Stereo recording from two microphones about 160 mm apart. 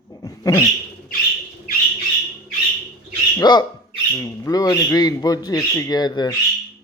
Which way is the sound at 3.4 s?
25° left (ahead or behind).